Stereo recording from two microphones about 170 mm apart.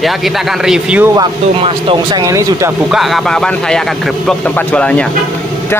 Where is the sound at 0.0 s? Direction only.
Centre (ahead or behind).